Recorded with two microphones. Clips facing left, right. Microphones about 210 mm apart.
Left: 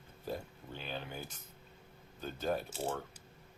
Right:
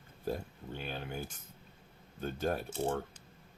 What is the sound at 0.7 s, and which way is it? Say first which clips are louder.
Speech: right 2 dB; 50° right (ahead or behind).